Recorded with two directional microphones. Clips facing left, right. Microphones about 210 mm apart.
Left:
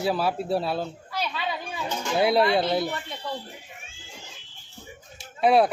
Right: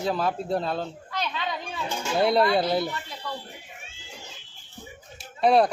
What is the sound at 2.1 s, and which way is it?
Speech, 5° left (ahead or behind).